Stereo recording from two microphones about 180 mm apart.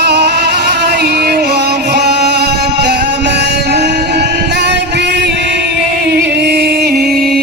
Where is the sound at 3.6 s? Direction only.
65° right (ahead or behind).